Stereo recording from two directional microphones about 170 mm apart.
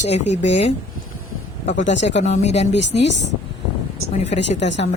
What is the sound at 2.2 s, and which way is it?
Speech, 40° left (ahead or behind).